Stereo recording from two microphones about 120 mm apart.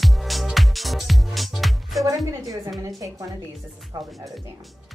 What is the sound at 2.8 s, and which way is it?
A woman's voice, 30° right (ahead or behind).